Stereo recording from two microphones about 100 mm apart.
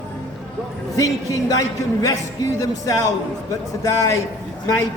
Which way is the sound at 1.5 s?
35° left (ahead or behind).